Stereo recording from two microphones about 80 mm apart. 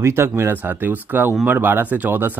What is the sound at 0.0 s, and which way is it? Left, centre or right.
Speech, right.